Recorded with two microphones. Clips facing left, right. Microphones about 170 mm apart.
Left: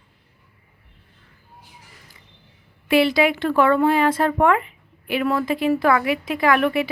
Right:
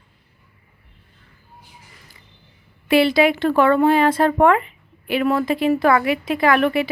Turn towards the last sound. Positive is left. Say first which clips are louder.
# right 2 dB
turn(degrees=-30)  # may be behind; listen again after turning